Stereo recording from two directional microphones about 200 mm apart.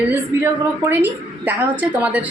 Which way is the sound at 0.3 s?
15° right (ahead or behind).